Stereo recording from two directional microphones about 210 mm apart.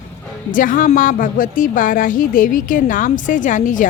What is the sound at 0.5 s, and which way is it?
A woman's voice, 40° left (ahead or behind).